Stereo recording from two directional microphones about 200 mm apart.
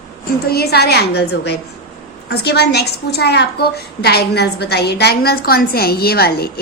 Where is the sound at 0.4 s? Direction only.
50° left (ahead or behind).